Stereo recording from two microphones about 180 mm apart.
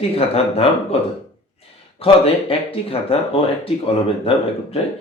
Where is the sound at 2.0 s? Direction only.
30° left (ahead or behind).